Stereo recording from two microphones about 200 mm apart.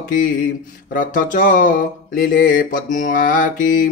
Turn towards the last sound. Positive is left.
turn(degrees=40)  # may be behind; listen again after turning